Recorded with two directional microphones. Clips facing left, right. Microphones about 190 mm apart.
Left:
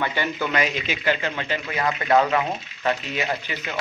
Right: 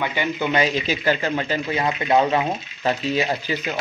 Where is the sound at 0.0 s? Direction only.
15° right (ahead or behind); by 1.8 s 35° right (ahead or behind).